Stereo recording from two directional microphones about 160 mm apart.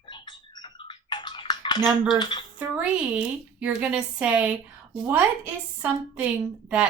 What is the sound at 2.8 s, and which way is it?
Speech, 5° right (ahead or behind).